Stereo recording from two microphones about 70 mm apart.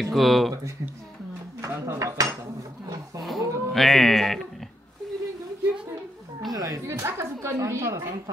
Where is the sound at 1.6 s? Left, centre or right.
Right.